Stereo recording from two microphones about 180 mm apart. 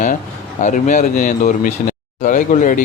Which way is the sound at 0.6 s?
45° left (ahead or behind).